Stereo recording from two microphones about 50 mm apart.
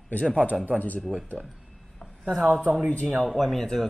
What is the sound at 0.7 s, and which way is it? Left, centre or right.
Speech, left.